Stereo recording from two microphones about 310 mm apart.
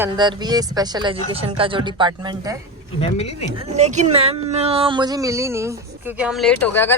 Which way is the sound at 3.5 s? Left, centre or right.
Right.